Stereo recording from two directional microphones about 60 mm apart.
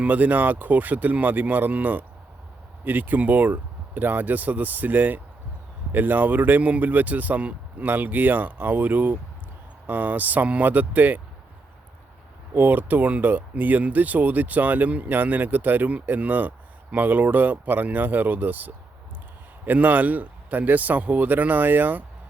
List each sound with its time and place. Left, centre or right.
0.0 s speech: right
12.5 s speech: right